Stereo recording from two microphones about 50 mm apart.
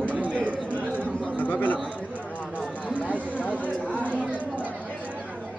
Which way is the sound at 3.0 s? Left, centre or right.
Left.